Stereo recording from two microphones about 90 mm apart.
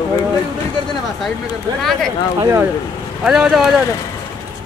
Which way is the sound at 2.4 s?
30° right (ahead or behind).